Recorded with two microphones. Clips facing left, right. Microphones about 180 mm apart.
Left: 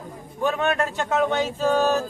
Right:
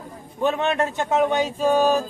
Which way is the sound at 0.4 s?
20° right (ahead or behind).